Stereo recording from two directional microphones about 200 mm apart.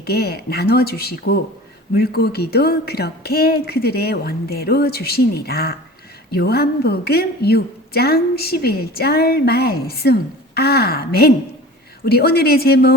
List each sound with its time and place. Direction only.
0.0 s a woman's voice: 50° left (ahead or behind)